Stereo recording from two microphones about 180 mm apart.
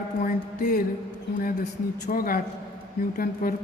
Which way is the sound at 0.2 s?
55° left (ahead or behind).